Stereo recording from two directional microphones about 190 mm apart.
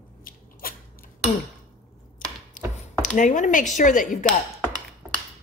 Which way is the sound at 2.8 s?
40° left (ahead or behind).